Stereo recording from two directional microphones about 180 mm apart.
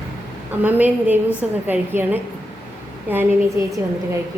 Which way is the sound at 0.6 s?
10° right (ahead or behind).